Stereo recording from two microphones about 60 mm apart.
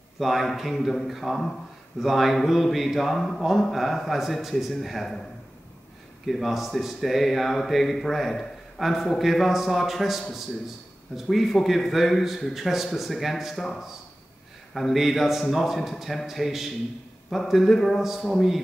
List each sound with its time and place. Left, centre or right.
0.2 s speech: centre
6.2 s speech: centre
14.7 s speech: centre